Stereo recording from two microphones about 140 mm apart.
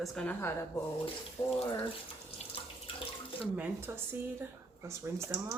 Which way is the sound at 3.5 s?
15° right (ahead or behind).